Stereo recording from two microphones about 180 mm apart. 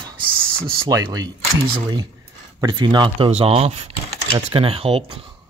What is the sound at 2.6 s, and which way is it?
Speech, 25° right (ahead or behind).